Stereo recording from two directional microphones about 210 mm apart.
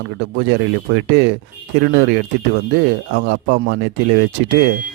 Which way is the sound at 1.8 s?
60° right (ahead or behind).